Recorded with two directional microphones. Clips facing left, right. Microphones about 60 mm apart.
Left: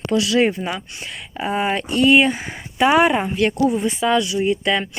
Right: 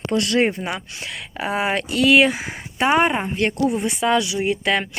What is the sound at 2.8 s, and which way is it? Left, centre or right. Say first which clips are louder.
Speech: left 3 dB; centre.